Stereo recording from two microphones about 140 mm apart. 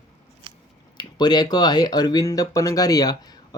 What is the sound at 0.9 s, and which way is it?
Speech, 30° left (ahead or behind).